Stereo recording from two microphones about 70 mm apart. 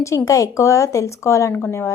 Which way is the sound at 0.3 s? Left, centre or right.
Left.